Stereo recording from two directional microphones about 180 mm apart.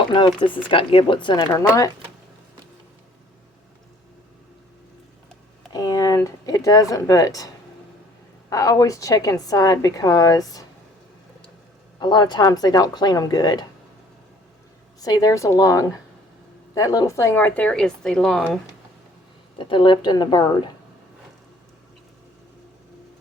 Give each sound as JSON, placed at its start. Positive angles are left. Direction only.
{"t": 0.1, "sound": "a woman's voice", "side_deg": 25}
{"t": 5.7, "sound": "a woman's voice", "side_deg": 20}
{"t": 11.9, "sound": "a woman's voice", "side_deg": 25}
{"t": 15.0, "sound": "a woman's voice", "side_deg": 20}
{"t": 19.5, "sound": "a woman's voice", "side_deg": 25}